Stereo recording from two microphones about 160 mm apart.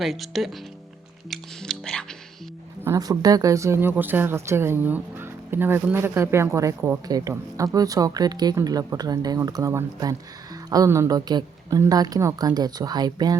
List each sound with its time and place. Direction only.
0.0 s speech: centre (ahead or behind)
1.3 s music: 5° left (ahead or behind)
2.8 s speech: 20° right (ahead or behind)